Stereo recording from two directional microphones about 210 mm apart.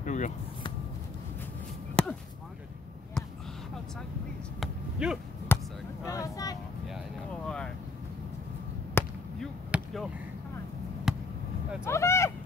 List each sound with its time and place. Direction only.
0.0 s a sound: 35° left (ahead or behind)
2.0 s chop: 5° left (ahead or behind)
3.2 s basketball bounce: 5° left (ahead or behind)
4.6 s a sound: 5° right (ahead or behind)
5.5 s basketball bounce: 10° left (ahead or behind)
6.0 s vehicle: 15° left (ahead or behind)
7.4 s vehicle: 5° left (ahead or behind)
9.0 s basketball bounce: 10° left (ahead or behind)
9.7 s basketball bounce: 5° right (ahead or behind)
11.1 s basketball bounce: centre (ahead or behind)
11.8 s a sound: 15° left (ahead or behind)